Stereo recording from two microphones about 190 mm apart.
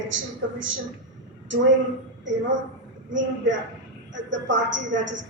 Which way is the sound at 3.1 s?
75° right (ahead or behind).